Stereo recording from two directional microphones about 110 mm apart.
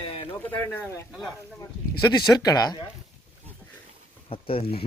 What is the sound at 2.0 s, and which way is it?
Speech, 40° left (ahead or behind).